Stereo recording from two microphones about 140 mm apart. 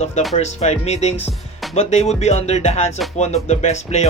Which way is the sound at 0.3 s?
50° left (ahead or behind).